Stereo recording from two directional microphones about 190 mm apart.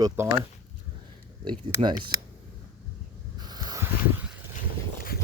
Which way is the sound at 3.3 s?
20° right (ahead or behind).